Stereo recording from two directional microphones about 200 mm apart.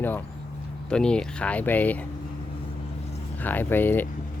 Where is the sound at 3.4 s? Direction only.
10° left (ahead or behind).